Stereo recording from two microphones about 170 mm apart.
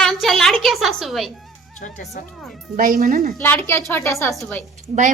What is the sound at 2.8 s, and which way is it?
Speech, 55° right (ahead or behind).